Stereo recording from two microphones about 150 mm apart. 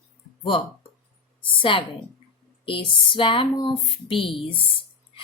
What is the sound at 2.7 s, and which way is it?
Speech, 35° left (ahead or behind).